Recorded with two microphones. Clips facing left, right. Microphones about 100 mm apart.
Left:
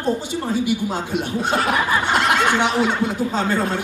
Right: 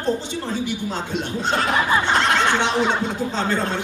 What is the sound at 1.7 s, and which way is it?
Snicker, 20° right (ahead or behind).